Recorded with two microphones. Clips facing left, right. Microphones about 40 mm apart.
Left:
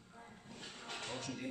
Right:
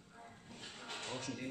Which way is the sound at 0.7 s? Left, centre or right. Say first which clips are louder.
Even; centre.